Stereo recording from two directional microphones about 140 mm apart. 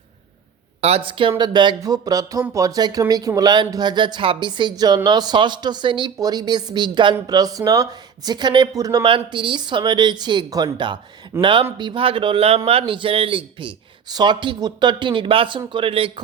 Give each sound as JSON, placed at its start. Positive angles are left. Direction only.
{"t": 0.8, "sound": "speech", "side_deg": -45}